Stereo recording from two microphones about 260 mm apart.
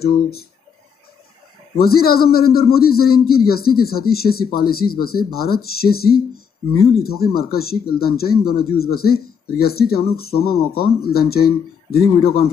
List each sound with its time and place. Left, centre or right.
0.0 s speech: left
1.8 s speech: left